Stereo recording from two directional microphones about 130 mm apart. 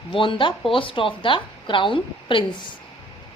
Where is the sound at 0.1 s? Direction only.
40° left (ahead or behind).